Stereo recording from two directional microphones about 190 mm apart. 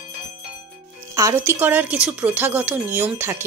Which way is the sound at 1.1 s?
15° right (ahead or behind).